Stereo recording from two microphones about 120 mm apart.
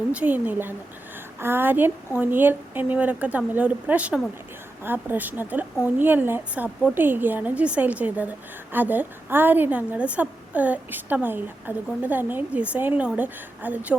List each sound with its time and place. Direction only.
0.1 s a woman's voice: 15° right (ahead or behind)